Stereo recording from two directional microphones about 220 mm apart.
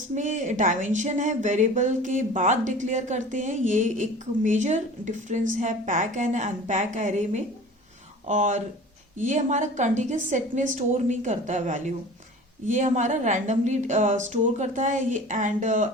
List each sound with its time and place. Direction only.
0.2 s speech: 35° right (ahead or behind)